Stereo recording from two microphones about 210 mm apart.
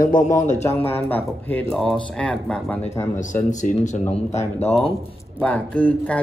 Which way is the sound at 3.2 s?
35° left (ahead or behind).